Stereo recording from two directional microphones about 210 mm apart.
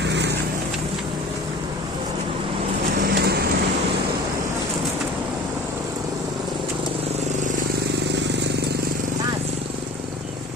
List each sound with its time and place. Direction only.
0.0 s vehicle: 55° right (ahead or behind)
3.0 s vehicle: 45° right (ahead or behind)